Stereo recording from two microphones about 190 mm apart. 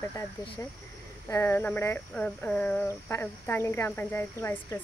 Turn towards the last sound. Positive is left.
turn(degrees=10)  # may be behind; listen again after turning